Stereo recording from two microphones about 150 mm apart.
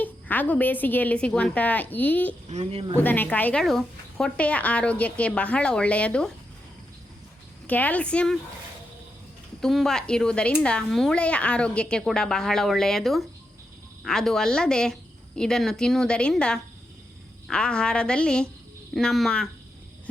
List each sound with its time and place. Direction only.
0.0 s a woman's voice: 10° left (ahead or behind)
2.5 s a woman's voice: 45° right (ahead or behind)
3.0 s a woman's voice: 10° left (ahead or behind)
7.7 s a woman's voice: 10° left (ahead or behind)
9.6 s a woman's voice: centre (ahead or behind)